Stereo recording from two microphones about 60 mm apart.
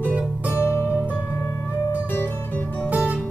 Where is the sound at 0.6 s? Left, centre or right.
Left.